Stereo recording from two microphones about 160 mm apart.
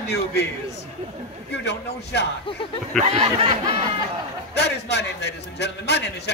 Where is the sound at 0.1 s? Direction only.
90° left.